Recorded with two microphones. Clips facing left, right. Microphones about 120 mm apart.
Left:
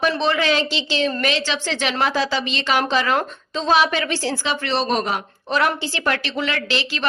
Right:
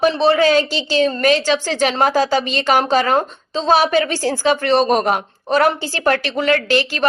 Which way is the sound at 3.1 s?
35° right (ahead or behind).